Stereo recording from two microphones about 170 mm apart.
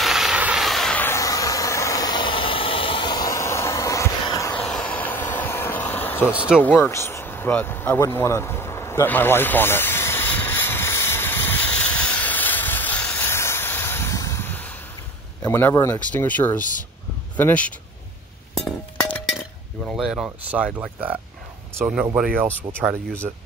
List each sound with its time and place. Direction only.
0.0 s vehicle: centre (ahead or behind); by 4.6 s 20° left (ahead or behind)
4.6 s vehicle: 5° left (ahead or behind)
6.6 s a sound: 10° left (ahead or behind)
15.4 s speech: 15° left (ahead or behind)
18.5 s dishes: 5° left (ahead or behind); by 21.2 s 10° right (ahead or behind)
21.7 s speech: 15° right (ahead or behind)
22.5 s speech: 10° left (ahead or behind)
23.2 s speech: 5° right (ahead or behind)